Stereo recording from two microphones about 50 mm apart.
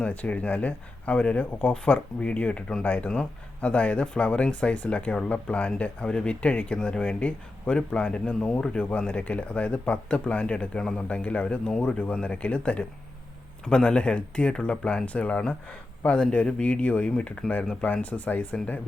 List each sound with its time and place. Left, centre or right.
0.0 s speech: left